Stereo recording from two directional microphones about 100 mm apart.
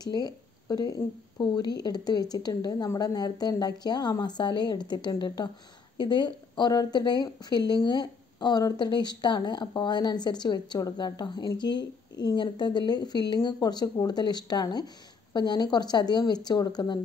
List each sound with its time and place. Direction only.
0.0 s speech: 40° left (ahead or behind)